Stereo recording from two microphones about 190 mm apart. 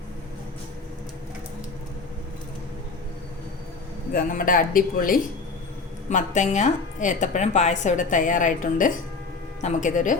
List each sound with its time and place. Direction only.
4.1 s a woman's voice: 45° left (ahead or behind)